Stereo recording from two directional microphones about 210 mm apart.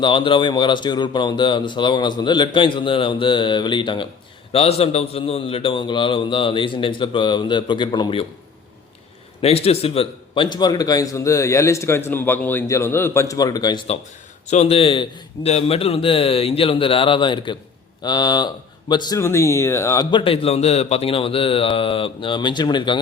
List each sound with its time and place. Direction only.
0.0 s speech: 25° left (ahead or behind)
9.4 s a man's voice: 30° left (ahead or behind)